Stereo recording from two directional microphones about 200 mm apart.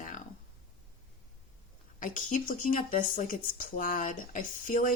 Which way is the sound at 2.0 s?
40° left (ahead or behind).